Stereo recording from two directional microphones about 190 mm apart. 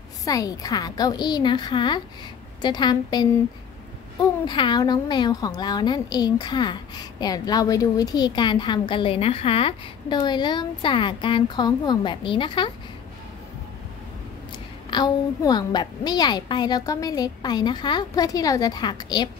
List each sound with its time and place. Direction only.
0.2 s a woman's voice: 20° left (ahead or behind)
4.5 s a woman's voice: 25° left (ahead or behind)
14.9 s a woman's voice: 25° left (ahead or behind)